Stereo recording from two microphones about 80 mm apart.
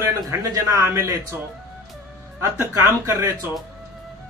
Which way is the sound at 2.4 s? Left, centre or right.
Right.